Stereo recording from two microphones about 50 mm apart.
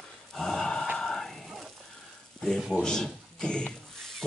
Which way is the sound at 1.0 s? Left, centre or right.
Centre.